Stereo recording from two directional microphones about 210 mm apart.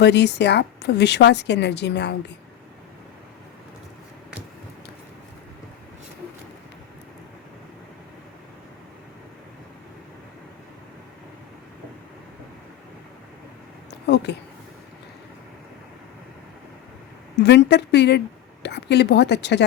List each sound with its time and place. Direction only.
0.0 s a woman's voice: 55° left (ahead or behind)
14.1 s a sound: 55° left (ahead or behind)
17.3 s a woman's voice: 55° left (ahead or behind)